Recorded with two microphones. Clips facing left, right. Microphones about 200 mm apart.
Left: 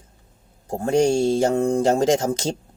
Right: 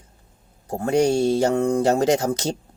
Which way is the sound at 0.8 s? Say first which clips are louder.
Even; 25° left (ahead or behind).